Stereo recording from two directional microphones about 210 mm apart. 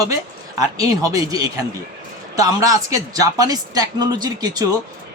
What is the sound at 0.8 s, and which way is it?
Speech, 15° right (ahead or behind).